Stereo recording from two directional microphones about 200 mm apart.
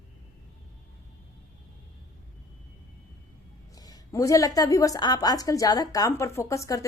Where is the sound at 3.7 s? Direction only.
20° left (ahead or behind).